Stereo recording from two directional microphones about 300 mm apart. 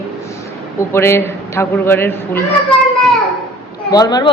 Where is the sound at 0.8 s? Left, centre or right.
Centre.